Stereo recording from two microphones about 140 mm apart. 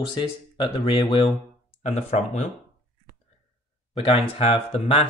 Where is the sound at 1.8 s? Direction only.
55° left (ahead or behind).